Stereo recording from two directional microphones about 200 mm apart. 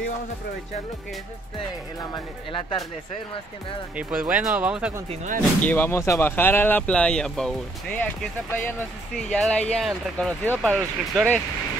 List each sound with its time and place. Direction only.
2.1 s speech: 25° left (ahead or behind)
3.9 s speech: 5° right (ahead or behind)
5.7 s speech: 10° left (ahead or behind)